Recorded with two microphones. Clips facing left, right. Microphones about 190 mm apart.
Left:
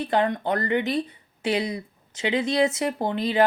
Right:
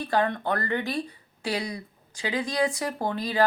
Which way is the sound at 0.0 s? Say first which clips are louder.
Left 2 dB; 20° left (ahead or behind).